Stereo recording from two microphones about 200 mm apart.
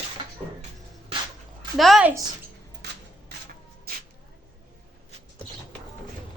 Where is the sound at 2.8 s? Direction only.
55° right (ahead or behind).